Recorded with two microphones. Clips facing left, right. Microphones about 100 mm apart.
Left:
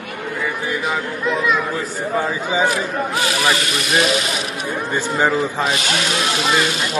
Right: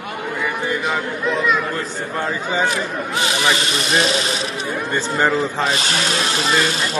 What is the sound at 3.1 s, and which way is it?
Speech, 20° right (ahead or behind).